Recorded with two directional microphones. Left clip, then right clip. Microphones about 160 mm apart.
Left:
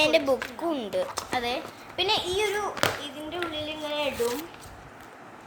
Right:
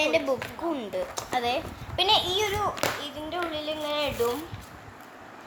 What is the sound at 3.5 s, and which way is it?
Child singing, 25° right (ahead or behind).